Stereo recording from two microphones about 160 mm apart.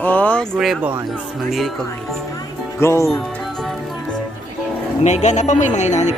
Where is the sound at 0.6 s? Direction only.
5° right (ahead or behind).